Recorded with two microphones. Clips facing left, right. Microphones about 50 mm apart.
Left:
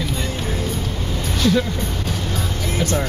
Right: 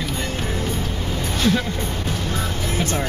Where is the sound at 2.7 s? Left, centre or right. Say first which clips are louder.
Left 3 dB; right.